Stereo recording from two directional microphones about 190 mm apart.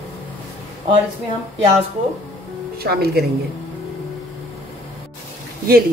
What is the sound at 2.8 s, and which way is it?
Speech, 55° right (ahead or behind).